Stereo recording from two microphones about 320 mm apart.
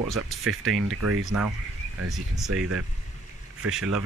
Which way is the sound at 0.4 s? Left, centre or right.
Right.